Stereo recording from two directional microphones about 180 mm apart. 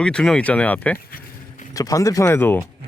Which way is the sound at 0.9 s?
55° left (ahead or behind).